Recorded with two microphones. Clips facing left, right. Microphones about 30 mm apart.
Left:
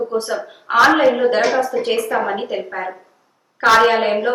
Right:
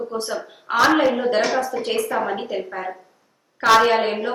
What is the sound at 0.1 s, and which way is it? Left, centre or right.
A woman's voice, left.